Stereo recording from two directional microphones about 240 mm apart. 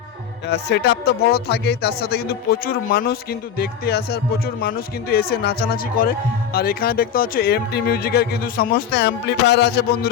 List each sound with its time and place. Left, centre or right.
0.4 s speech: left